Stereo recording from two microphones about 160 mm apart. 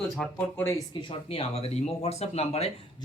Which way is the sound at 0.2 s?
5° left (ahead or behind).